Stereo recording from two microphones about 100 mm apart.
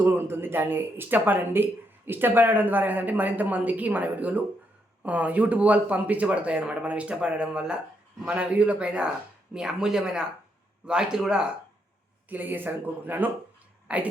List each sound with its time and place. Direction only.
0.0 s speech: 25° right (ahead or behind); by 11.5 s 5° right (ahead or behind)
12.3 s speech: 20° right (ahead or behind)